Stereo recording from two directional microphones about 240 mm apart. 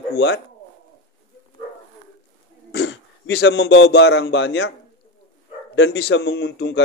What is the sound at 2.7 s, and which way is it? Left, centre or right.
Speech, left.